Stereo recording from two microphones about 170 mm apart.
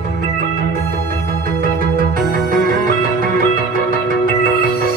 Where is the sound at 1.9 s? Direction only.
55° right (ahead or behind).